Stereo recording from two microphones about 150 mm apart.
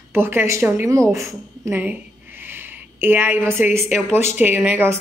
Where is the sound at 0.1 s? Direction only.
15° right (ahead or behind).